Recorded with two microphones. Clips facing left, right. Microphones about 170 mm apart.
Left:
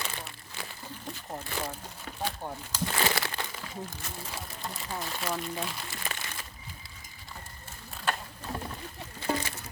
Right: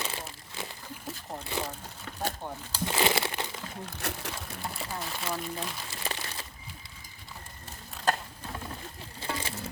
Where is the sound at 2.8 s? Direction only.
20° right (ahead or behind).